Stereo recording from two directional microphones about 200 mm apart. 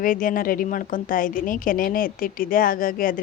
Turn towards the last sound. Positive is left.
turn(degrees=45)  # may be behind; listen again after turning